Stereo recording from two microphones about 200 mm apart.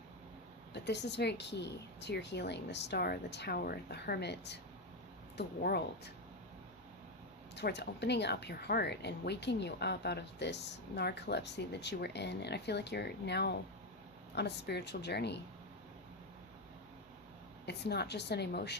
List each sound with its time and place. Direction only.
0.7 s speech: 60° left (ahead or behind)
7.5 s speech: 55° left (ahead or behind)
17.7 s speech: 55° left (ahead or behind)